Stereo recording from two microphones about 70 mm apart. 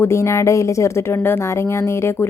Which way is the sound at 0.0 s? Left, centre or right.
Left.